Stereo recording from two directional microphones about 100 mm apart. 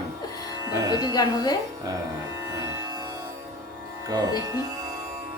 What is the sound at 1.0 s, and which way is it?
Speech, 45° left (ahead or behind).